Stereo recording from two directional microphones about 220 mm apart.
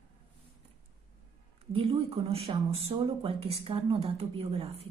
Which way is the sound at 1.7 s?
25° right (ahead or behind).